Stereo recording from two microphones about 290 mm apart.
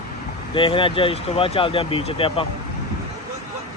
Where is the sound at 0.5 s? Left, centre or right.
Centre.